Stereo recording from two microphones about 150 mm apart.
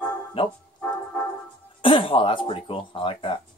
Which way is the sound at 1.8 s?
35° left (ahead or behind).